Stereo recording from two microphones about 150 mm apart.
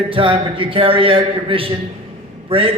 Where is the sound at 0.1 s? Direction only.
35° right (ahead or behind).